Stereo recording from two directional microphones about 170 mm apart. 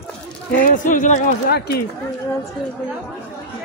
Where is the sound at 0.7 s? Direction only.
50° left (ahead or behind).